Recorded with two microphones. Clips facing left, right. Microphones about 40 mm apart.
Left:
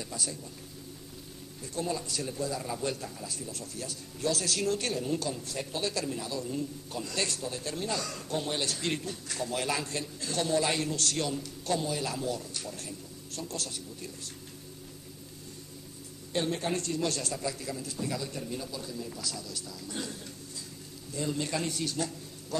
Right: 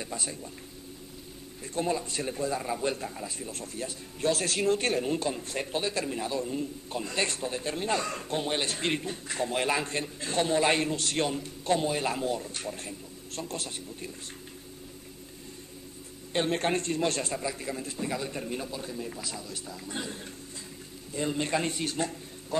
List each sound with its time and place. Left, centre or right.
0.0 s a man's voice: right
1.6 s a man's voice: right
16.3 s a man's voice: right